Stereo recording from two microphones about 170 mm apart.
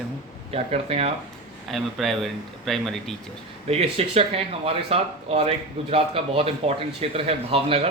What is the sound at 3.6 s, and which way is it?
Speech, 35° right (ahead or behind).